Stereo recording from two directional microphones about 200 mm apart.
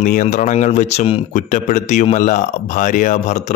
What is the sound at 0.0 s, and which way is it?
Speech, 40° left (ahead or behind).